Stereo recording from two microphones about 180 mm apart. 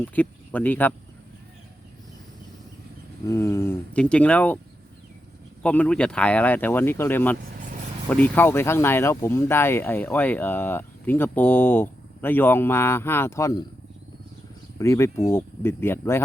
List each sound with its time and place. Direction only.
0.0 s speech: 10° left (ahead or behind)
3.2 s speech: 15° left (ahead or behind)
5.6 s speech: 5° left (ahead or behind)
14.8 s speech: 15° left (ahead or behind)